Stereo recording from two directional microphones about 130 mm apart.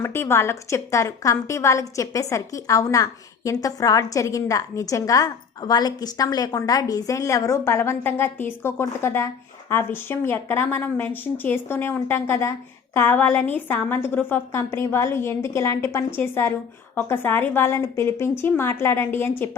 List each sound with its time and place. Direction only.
0.0 s a woman's voice: 20° left (ahead or behind)